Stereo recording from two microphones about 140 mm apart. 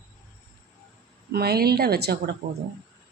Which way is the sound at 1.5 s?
90° right.